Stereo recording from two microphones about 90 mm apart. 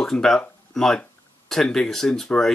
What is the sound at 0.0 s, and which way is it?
Speech, 5° left (ahead or behind).